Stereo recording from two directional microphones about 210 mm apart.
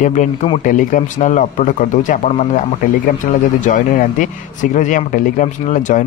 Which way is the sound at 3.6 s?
40° left (ahead or behind).